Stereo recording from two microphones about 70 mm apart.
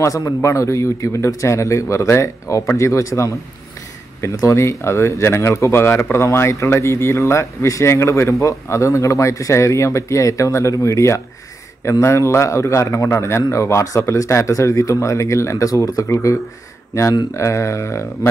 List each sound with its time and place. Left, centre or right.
0.0 s speech: left
4.4 s speech: left
17.4 s speech: left